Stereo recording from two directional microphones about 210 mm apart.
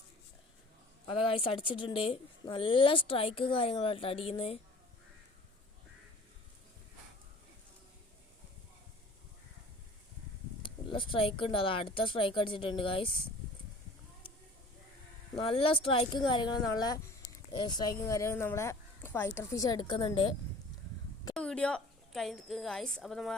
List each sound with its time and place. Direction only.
1.1 s a woman's voice: 25° left (ahead or behind)
10.6 s a woman's voice: 25° left (ahead or behind)
15.4 s a woman's voice: 25° left (ahead or behind)
21.3 s a woman's voice: 5° left (ahead or behind)